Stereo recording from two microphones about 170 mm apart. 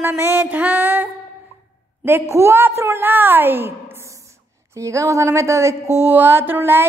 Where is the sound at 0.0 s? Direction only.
15° right (ahead or behind).